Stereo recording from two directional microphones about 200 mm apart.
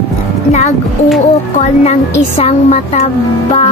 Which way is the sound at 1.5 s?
35° left (ahead or behind).